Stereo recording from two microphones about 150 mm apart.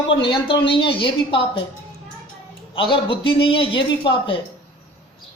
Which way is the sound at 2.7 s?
35° left (ahead or behind).